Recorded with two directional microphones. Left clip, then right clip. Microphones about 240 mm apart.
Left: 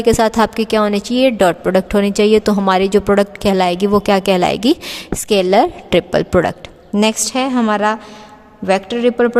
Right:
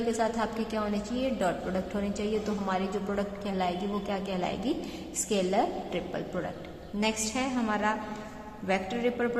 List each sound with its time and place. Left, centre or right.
0.2 s a woman's voice: left